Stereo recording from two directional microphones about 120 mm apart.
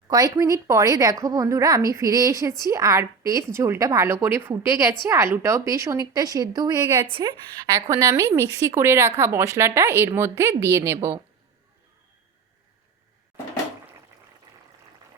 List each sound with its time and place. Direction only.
0.1 s a woman's voice: 30° right (ahead or behind)
7.8 s a woman's voice: 25° right (ahead or behind)